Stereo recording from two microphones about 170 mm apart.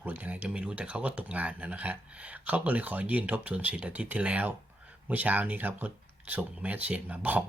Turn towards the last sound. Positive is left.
turn(degrees=-10)  # may be behind; listen again after turning